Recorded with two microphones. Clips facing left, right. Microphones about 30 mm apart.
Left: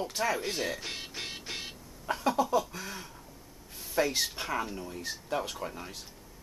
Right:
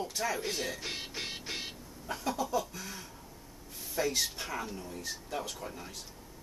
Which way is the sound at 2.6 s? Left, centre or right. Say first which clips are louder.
Left 4 dB; centre.